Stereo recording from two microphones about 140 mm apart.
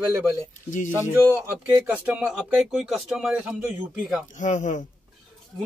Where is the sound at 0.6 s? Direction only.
65° left (ahead or behind).